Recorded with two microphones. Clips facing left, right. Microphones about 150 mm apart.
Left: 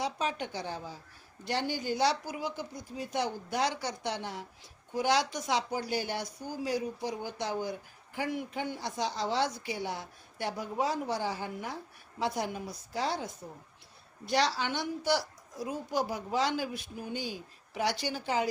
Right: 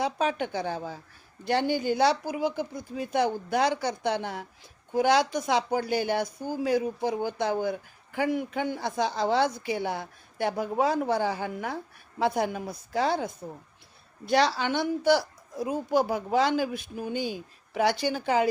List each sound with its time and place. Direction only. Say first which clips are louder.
0.0 s speech: right 6 dB; 55° right (ahead or behind)